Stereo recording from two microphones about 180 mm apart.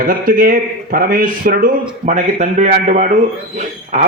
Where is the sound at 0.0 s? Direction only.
50° right (ahead or behind).